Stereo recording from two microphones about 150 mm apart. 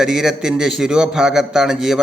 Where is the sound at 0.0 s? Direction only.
5° right (ahead or behind).